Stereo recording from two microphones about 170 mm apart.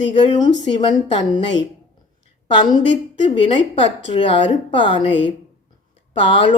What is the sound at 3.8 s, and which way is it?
A woman's voice, 30° left (ahead or behind).